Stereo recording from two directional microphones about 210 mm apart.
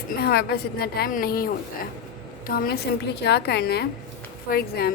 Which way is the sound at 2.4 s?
45° left (ahead or behind).